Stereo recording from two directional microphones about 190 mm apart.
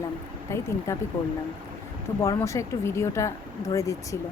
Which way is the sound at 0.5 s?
15° left (ahead or behind).